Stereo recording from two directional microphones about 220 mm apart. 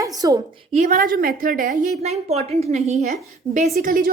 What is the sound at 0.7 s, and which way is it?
A woman's voice, 40° right (ahead or behind).